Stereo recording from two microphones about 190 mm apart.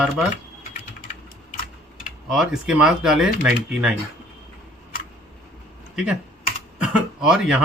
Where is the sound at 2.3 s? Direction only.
Centre (ahead or behind).